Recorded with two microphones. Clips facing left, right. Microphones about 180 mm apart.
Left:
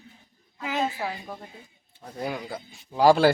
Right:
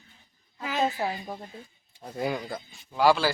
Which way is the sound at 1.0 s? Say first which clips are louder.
Right 2 dB; 25° right (ahead or behind).